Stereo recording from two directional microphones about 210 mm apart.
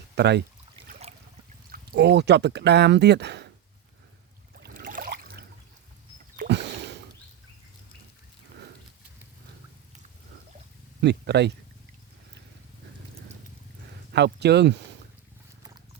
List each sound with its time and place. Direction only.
0.2 s speech: 55° right (ahead or behind)
0.9 s trickle: 30° right (ahead or behind)
1.7 s speech: 50° right (ahead or behind)
4.5 s a sound: 50° right (ahead or behind)
11.0 s speech: 55° right (ahead or behind)
14.1 s speech: 50° right (ahead or behind)